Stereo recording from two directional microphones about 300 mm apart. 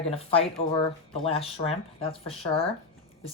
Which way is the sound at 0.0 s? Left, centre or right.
Centre.